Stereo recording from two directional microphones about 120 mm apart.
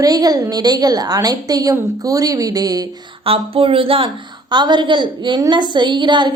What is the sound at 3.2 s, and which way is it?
A woman's voice, 50° right (ahead or behind).